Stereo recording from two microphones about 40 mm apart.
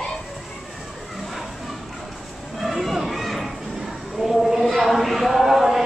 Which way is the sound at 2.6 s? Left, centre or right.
Centre.